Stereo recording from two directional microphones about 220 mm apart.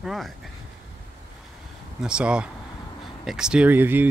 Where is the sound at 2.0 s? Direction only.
5° right (ahead or behind).